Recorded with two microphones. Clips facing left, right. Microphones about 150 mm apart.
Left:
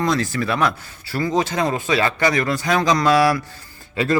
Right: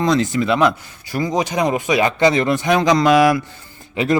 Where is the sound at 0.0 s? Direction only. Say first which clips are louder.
Right 4 dB; 20° right (ahead or behind).